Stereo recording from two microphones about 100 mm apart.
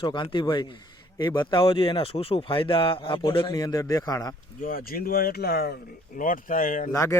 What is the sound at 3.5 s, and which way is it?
Speech, 35° left (ahead or behind).